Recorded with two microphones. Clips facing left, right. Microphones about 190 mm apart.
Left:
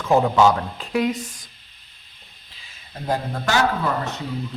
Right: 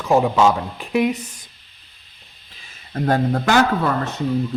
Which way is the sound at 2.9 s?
70° right (ahead or behind).